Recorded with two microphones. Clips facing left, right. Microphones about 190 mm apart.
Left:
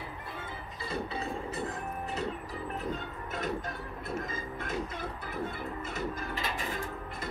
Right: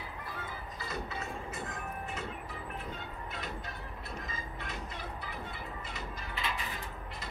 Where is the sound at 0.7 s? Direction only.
30° left (ahead or behind).